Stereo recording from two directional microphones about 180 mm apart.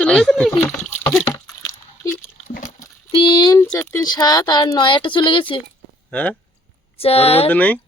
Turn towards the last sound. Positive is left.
turn(degrees=10)  # may be behind; listen again after turning